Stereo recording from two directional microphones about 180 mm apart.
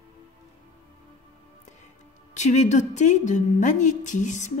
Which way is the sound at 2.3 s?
40° left (ahead or behind).